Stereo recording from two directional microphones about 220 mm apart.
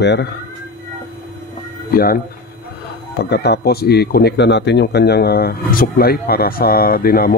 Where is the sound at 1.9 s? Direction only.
40° left (ahead or behind).